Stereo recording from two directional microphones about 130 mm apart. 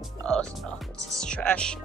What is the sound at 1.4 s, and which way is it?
Speech, 10° left (ahead or behind).